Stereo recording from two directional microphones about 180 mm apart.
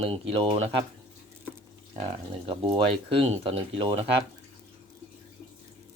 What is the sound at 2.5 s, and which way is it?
Speech, 30° right (ahead or behind).